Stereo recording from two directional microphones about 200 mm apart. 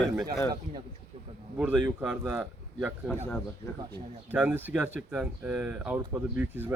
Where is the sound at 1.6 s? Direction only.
5° right (ahead or behind).